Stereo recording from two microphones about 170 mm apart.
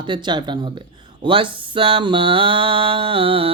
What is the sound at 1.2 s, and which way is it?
Mantra, 30° right (ahead or behind).